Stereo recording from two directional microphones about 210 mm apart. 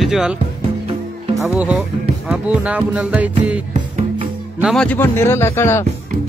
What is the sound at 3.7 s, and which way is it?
Music, 30° right (ahead or behind).